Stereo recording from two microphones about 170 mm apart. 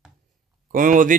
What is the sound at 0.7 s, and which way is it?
Speech, 50° right (ahead or behind).